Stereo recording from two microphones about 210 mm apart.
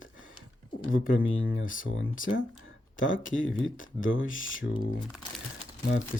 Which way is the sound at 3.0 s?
65° left (ahead or behind).